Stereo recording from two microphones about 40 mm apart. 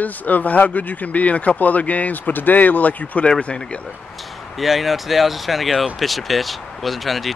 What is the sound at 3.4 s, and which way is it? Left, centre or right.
Speech, left.